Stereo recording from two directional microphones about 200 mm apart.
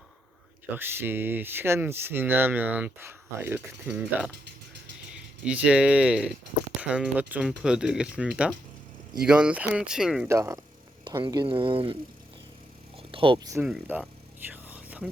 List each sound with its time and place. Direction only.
0.8 s speech: 10° right (ahead or behind)
10.2 s speech: 15° right (ahead or behind)
13.0 s speech: 25° right (ahead or behind)
13.6 s a sound: 5° right (ahead or behind)